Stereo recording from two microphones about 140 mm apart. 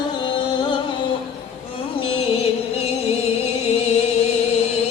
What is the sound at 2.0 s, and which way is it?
Music, 45° left (ahead or behind).